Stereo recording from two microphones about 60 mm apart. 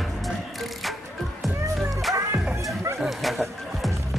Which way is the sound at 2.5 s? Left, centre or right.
Right.